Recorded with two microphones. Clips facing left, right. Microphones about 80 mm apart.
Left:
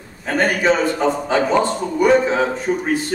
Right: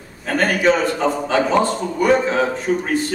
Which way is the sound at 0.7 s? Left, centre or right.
Centre.